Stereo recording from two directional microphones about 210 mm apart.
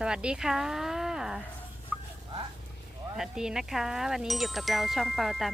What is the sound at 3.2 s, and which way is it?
Jingle, 5° right (ahead or behind).